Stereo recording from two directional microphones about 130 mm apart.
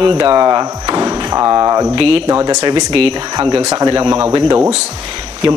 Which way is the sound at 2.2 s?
30° right (ahead or behind).